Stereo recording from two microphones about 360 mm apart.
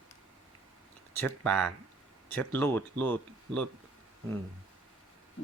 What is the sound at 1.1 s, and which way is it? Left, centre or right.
Speech, centre.